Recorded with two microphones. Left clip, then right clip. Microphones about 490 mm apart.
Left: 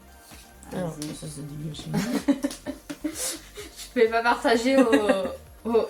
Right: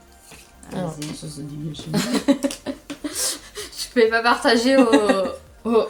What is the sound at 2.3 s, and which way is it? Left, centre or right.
Speech, left.